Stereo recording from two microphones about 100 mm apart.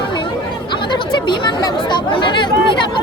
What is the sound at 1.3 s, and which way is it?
Chatter, 45° left (ahead or behind).